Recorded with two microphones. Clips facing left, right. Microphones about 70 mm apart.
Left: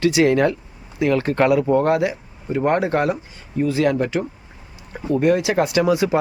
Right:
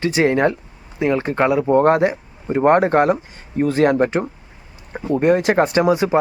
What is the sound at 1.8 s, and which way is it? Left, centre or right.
Speech, right.